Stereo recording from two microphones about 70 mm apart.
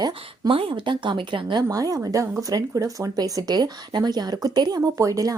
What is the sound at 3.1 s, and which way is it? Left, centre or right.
Speech, right.